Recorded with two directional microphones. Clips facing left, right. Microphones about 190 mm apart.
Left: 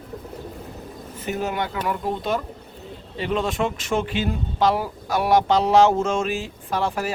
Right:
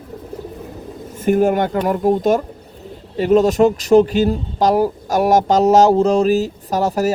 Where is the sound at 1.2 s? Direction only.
50° right (ahead or behind).